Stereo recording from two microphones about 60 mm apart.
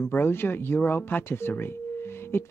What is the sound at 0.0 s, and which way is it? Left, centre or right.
Speech, left.